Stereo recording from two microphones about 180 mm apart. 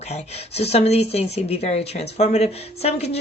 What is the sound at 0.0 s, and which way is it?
Speech, 40° left (ahead or behind).